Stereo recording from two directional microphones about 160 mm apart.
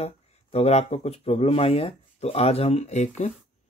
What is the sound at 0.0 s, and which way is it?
Speech, 40° left (ahead or behind).